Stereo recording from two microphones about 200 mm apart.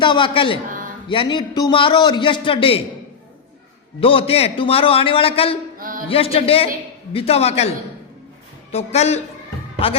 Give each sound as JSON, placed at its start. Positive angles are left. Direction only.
{"t": 0.0, "sound": "a man's voice", "side_deg": 25}
{"t": 4.0, "sound": "a man's voice", "side_deg": 25}
{"t": 8.7, "sound": "a man's voice", "side_deg": 30}